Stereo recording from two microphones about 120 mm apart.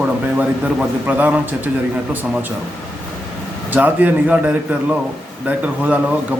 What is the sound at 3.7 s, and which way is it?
A man's voice, 15° right (ahead or behind).